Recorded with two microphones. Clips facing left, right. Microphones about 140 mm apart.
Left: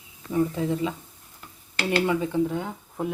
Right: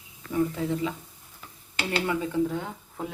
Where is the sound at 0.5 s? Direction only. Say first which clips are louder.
Left 2 dB; 25° left (ahead or behind).